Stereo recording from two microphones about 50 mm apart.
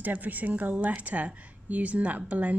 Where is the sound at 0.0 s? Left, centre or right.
Right.